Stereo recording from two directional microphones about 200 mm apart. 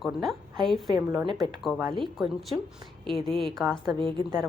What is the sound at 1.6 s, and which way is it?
Speech, centre (ahead or behind).